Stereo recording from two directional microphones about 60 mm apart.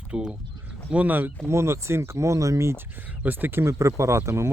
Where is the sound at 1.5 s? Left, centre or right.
Right.